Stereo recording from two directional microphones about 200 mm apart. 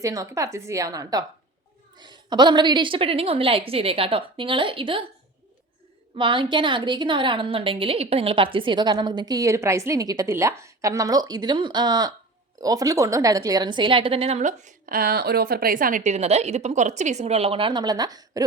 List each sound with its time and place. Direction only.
0.0 s a woman's voice: 15° right (ahead or behind)
6.1 s a woman's voice: 25° right (ahead or behind)